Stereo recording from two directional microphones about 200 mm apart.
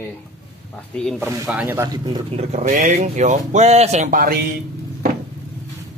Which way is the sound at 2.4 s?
35° right (ahead or behind).